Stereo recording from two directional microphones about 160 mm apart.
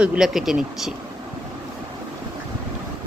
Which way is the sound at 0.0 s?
5° right (ahead or behind).